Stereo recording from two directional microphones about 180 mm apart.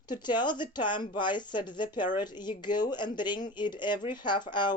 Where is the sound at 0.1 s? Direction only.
25° left (ahead or behind).